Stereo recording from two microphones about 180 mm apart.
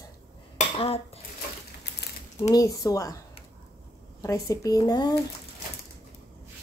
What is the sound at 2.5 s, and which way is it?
Speech, 20° left (ahead or behind).